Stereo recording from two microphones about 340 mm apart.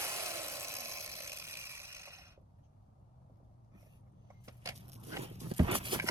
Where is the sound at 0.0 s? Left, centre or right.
Centre.